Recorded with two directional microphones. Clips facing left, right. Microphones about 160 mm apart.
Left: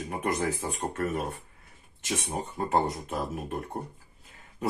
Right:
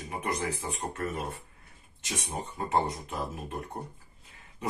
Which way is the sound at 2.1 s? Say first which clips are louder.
Left 4 dB; 40° left (ahead or behind).